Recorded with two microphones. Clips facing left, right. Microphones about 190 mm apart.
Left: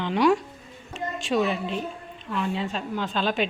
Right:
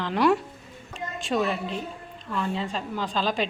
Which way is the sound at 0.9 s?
Centre (ahead or behind).